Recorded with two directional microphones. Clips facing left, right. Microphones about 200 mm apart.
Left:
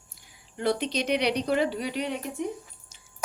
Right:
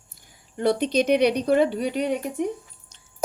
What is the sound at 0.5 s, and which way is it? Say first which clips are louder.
A woman's voice: right 6 dB; 50° right (ahead or behind).